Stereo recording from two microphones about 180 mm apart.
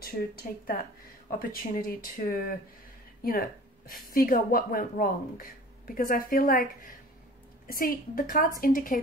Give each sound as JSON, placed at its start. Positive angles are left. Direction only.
{"t": 0.0, "sound": "speech", "side_deg": 55}
{"t": 3.9, "sound": "speech", "side_deg": 55}